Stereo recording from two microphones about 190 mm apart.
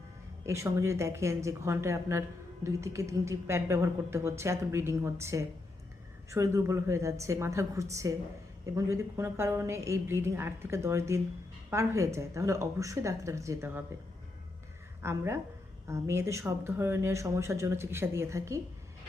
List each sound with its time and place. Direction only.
0.4 s a woman's voice: 15° right (ahead or behind)
15.0 s a woman's voice: 15° right (ahead or behind)